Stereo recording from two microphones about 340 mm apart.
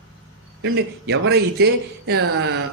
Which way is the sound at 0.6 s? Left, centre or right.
Right.